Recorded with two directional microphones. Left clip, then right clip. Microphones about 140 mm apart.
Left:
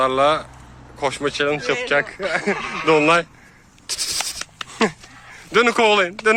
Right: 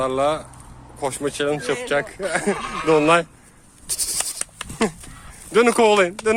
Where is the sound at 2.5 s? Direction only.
5° right (ahead or behind).